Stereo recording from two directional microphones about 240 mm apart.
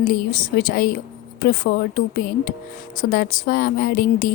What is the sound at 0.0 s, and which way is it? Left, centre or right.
Speech, left.